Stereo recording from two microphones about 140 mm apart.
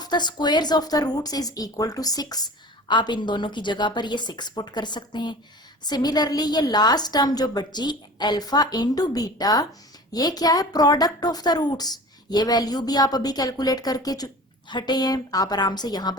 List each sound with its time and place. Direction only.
0.0 s a woman's voice: 30° left (ahead or behind)